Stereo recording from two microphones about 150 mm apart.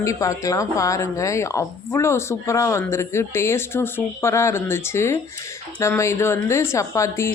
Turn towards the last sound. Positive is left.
turn(degrees=20)  # may be behind; listen again after turning